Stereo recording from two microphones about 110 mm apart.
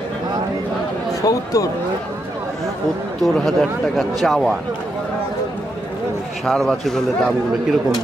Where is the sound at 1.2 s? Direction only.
30° left (ahead or behind).